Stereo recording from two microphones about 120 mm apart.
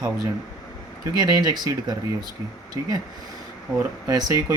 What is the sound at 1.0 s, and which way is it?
Speech, 35° right (ahead or behind).